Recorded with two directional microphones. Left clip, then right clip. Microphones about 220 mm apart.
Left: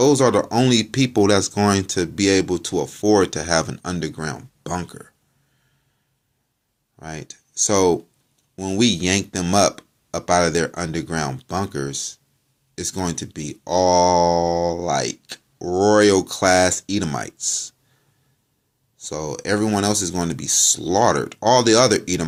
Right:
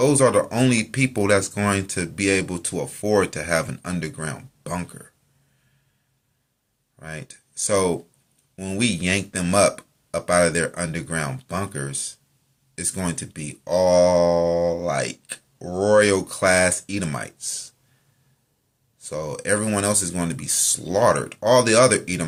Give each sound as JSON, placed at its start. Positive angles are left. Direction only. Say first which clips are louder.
{"t": 0.0, "sound": "speech", "louder": "left 2 dB", "side_deg": 30}
{"t": 7.0, "sound": "speech", "louder": "left 2 dB", "side_deg": 30}
{"t": 18.9, "sound": "speech", "louder": "left 1 dB", "side_deg": 30}